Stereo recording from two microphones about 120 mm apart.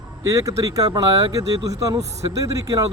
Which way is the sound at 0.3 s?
25° right (ahead or behind).